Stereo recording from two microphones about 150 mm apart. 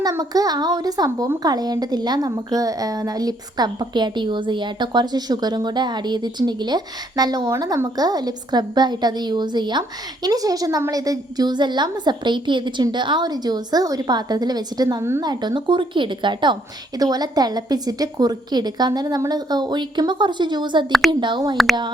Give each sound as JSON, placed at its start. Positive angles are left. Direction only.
{"t": 0.0, "sound": "speech", "side_deg": -25}